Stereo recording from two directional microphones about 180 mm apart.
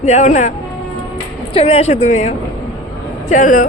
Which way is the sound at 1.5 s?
30° left (ahead or behind).